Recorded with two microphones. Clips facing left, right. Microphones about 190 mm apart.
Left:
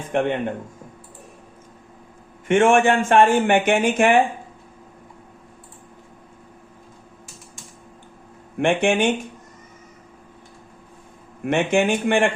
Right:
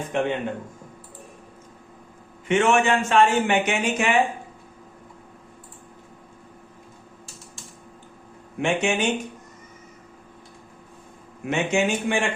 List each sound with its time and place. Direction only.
0.1 s speech: 50° left (ahead or behind)
2.5 s speech: 50° left (ahead or behind)
8.5 s speech: 55° left (ahead or behind)
11.4 s speech: 55° left (ahead or behind)